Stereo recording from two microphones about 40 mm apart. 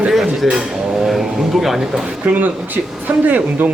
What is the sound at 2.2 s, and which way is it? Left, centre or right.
Speech, right.